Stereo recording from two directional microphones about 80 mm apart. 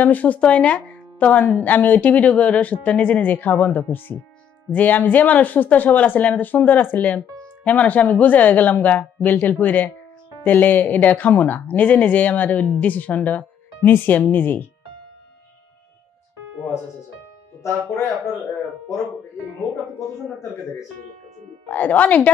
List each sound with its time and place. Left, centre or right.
0.0 s speech: left
21.6 s speech: left